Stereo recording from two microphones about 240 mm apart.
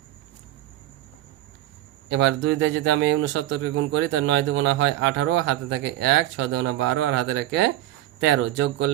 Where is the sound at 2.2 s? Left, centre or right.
Right.